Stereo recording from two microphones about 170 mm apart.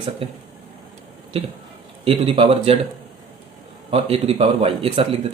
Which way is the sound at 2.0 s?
35° right (ahead or behind).